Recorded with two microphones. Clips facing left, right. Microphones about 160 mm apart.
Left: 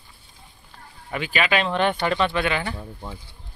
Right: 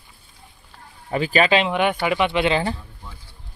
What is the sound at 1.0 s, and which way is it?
Speech, 35° right (ahead or behind).